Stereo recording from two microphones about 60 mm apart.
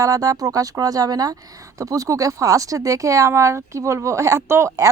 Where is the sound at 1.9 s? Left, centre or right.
Right.